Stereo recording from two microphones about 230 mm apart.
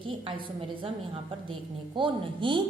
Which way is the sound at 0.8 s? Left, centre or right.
Right.